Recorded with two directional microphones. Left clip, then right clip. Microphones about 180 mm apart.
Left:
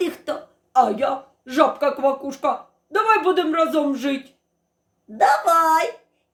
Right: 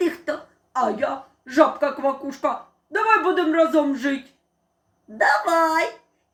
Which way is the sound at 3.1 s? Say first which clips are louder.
Even; 55° left (ahead or behind).